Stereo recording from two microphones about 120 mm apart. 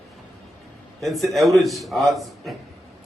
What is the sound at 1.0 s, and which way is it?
A man's voice, centre (ahead or behind).